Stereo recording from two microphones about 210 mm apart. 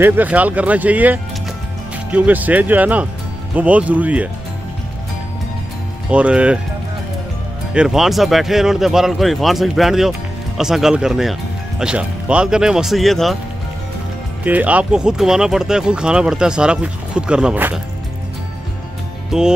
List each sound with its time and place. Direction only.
0.0 s speech: 10° right (ahead or behind)
6.0 s speech: 5° right (ahead or behind)
7.7 s speech: 5° right (ahead or behind)
14.4 s speech: 5° right (ahead or behind)
19.3 s speech: 5° right (ahead or behind)